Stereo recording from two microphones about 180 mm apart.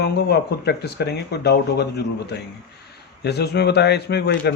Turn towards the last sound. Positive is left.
turn(degrees=65)  # may be behind; listen again after turning